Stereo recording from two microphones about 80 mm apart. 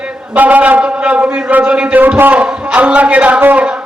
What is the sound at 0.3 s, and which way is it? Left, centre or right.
A man's voice, centre.